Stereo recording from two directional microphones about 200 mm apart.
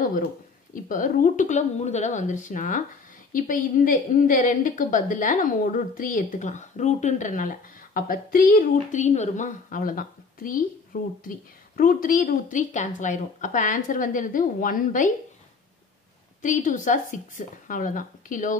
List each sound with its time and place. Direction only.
0.8 s a woman's voice: 40° left (ahead or behind)
16.4 s a woman's voice: 40° left (ahead or behind)